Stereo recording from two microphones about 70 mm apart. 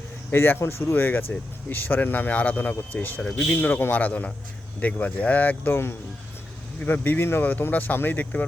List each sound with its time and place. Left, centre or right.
0.3 s speech: left
3.2 s speech: centre
3.5 s speech: left
6.8 s speech: left